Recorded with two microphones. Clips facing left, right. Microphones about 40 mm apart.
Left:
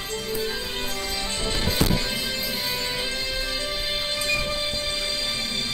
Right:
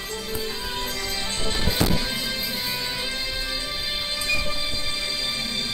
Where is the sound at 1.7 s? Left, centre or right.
Centre.